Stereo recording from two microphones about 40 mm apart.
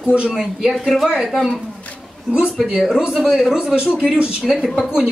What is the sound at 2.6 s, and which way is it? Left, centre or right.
Speech, centre.